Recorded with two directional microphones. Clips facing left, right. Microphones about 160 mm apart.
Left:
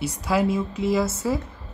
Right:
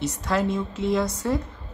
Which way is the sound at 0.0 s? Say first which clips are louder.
Left 2 dB; 10° left (ahead or behind).